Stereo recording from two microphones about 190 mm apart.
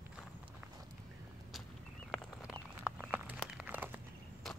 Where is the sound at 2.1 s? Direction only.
5° right (ahead or behind).